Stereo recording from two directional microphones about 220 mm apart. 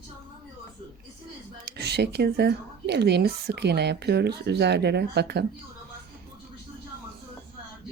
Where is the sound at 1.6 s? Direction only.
50° right (ahead or behind).